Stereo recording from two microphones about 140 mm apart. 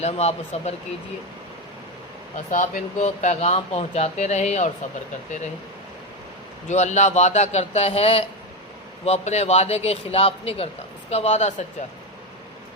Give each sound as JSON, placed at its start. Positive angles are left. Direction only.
{"t": 0.0, "sound": "speech", "side_deg": 50}
{"t": 2.5, "sound": "speech", "side_deg": 65}
{"t": 6.7, "sound": "speech", "side_deg": 55}